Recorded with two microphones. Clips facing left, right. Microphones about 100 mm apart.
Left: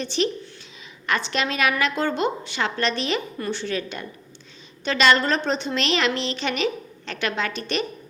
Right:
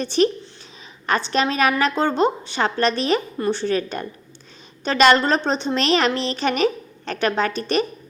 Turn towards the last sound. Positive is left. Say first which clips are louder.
# right 5 dB
turn(degrees=-40)  # may be behind; listen again after turning